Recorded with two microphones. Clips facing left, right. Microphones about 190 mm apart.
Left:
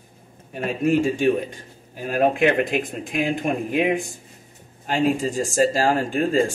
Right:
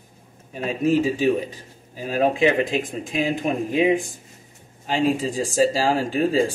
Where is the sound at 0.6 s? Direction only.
55° left (ahead or behind).